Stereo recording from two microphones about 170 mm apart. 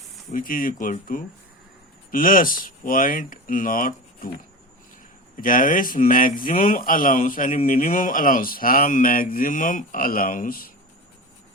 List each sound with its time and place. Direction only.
0.3 s speech: 55° left (ahead or behind)
5.4 s speech: 55° left (ahead or behind)